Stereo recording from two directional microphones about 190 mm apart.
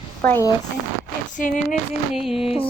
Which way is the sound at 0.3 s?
15° left (ahead or behind).